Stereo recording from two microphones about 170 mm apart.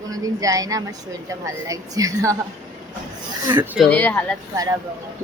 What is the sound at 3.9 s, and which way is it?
Speech, 10° left (ahead or behind).